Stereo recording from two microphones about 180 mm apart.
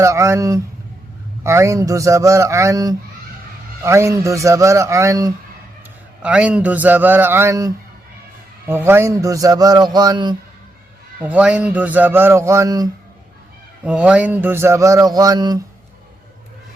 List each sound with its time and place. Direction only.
0.0 s a man's voice: 15° right (ahead or behind)
6.2 s a man's voice: 5° right (ahead or behind); by 10.3 s 25° right (ahead or behind)
11.2 s a man's voice: 5° right (ahead or behind)
13.8 s a man's voice: 5° right (ahead or behind)